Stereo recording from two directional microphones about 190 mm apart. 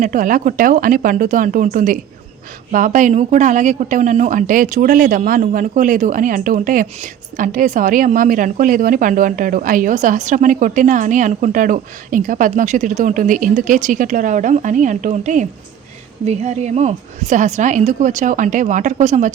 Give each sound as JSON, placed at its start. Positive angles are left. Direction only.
{"t": 0.0, "sound": "a woman's voice", "side_deg": -45}